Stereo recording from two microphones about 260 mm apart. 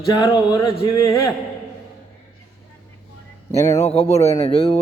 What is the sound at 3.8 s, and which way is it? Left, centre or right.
Speech, left.